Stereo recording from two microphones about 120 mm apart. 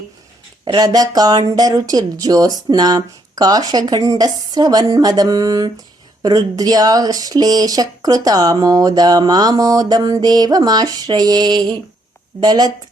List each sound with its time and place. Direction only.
0.6 s speech: 35° right (ahead or behind)